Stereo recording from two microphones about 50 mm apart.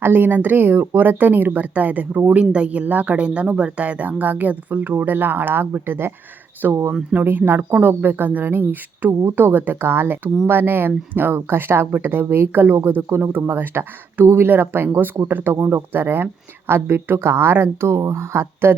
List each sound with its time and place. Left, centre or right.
0.0 s speech: right
6.6 s speech: right
9.8 s speech: right
15.5 s speech: right